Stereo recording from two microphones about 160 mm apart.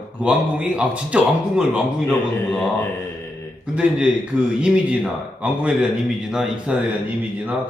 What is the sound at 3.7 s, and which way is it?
A man's voice, 5° right (ahead or behind).